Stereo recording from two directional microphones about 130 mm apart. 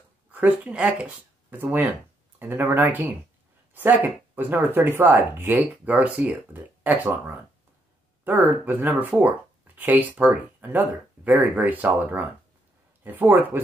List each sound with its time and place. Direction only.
0.3 s speech: 15° right (ahead or behind)